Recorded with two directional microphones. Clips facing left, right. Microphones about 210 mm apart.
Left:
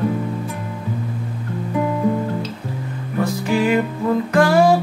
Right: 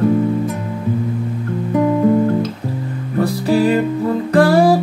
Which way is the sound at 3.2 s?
35° right (ahead or behind).